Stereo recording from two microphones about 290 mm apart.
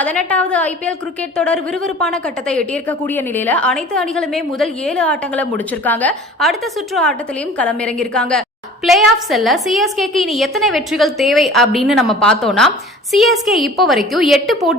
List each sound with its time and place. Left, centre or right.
0.0 s a woman's voice: centre